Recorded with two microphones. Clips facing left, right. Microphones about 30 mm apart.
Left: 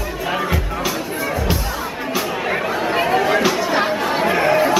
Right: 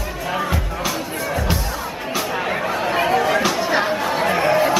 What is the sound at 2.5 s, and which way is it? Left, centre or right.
Chatter, centre.